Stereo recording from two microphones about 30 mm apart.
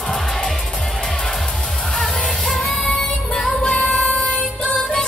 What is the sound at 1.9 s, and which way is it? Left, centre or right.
Music, centre.